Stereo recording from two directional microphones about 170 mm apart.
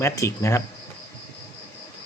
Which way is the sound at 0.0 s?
20° left (ahead or behind).